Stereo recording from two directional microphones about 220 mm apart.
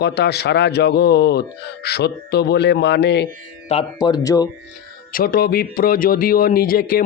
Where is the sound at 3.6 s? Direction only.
25° left (ahead or behind).